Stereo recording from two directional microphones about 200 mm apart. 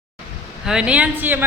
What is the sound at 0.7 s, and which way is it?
Speech, 5° right (ahead or behind).